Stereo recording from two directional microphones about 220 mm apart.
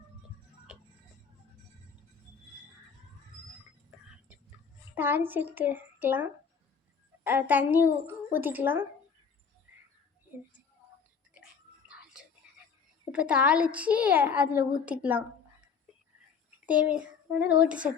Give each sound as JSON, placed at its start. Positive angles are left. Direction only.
{"t": 4.9, "sound": "speech", "side_deg": -10}
{"t": 13.1, "sound": "a child's voice", "side_deg": -5}
{"t": 16.6, "sound": "a child's voice", "side_deg": -5}